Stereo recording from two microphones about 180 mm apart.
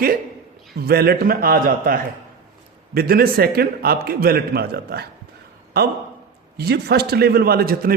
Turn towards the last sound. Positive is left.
turn(degrees=-55)  # may be behind; listen again after turning